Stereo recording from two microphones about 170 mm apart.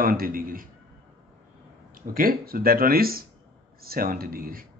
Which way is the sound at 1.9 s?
55° right (ahead or behind).